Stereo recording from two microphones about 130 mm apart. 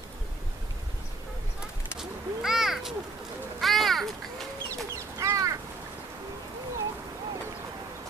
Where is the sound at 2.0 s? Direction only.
5° right (ahead or behind).